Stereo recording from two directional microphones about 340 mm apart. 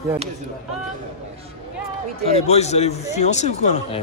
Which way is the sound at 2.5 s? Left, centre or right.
Centre.